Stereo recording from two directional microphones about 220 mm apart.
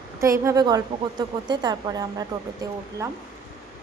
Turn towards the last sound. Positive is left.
turn(degrees=-15)  # may be behind; listen again after turning